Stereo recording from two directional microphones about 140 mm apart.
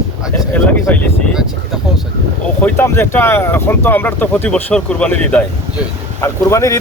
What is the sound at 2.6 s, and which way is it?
A man's voice, 15° left (ahead or behind).